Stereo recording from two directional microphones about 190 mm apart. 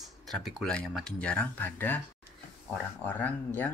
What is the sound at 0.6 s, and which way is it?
Speech, centre (ahead or behind).